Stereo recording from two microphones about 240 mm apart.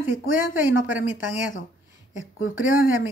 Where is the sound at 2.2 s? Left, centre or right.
Left.